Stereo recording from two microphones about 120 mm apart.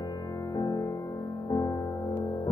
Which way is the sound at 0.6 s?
30° left (ahead or behind).